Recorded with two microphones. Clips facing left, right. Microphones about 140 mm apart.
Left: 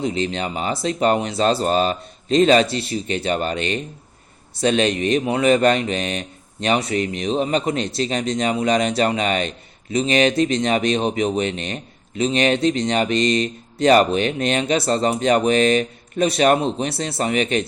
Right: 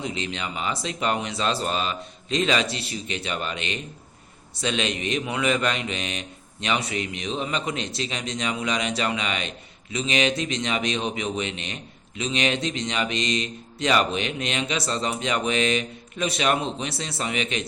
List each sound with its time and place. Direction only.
0.0 s speech: 40° left (ahead or behind)